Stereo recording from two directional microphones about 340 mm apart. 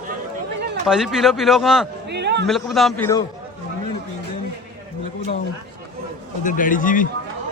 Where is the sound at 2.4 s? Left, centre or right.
Centre.